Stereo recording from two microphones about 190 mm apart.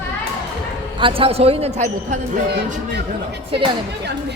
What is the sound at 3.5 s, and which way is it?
Speech, 30° right (ahead or behind).